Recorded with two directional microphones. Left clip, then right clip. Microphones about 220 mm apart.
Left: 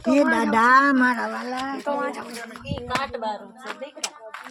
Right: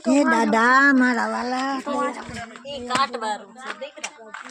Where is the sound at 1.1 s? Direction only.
40° right (ahead or behind).